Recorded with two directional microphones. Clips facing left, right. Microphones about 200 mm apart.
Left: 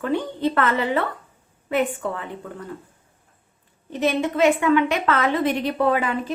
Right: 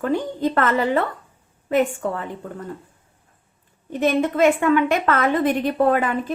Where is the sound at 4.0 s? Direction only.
50° right (ahead or behind).